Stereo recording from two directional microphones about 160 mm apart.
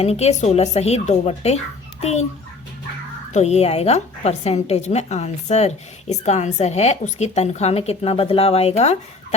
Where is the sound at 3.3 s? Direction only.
45° left (ahead or behind).